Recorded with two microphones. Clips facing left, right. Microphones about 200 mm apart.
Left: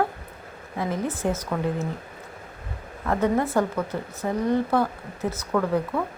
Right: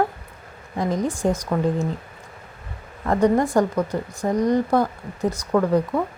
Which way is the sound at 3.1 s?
15° right (ahead or behind).